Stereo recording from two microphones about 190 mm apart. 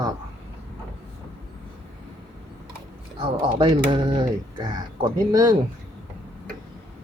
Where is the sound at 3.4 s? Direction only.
25° right (ahead or behind).